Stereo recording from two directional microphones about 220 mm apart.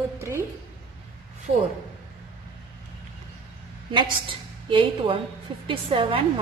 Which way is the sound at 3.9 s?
20° right (ahead or behind).